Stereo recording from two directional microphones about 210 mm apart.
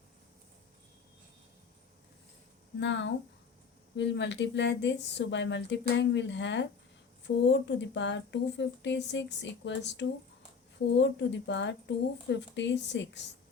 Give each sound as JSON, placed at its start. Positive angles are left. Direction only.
{"t": 2.8, "sound": "speech", "side_deg": 60}